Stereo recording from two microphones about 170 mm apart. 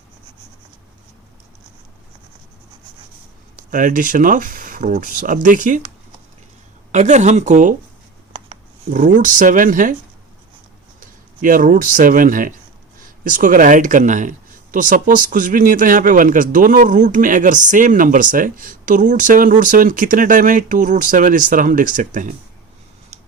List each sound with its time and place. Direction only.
3.5 s speech: 50° right (ahead or behind)
6.9 s speech: 45° right (ahead or behind)
11.0 s speech: 55° right (ahead or behind)